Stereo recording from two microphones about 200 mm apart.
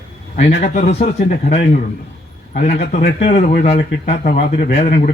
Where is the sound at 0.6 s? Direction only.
35° left (ahead or behind).